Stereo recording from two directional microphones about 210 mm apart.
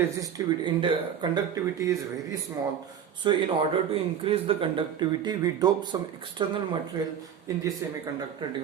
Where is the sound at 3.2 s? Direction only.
25° right (ahead or behind).